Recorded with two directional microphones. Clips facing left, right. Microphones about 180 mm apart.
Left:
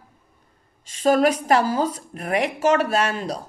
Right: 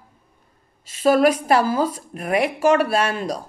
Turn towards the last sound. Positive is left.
turn(degrees=-10)  # may be behind; listen again after turning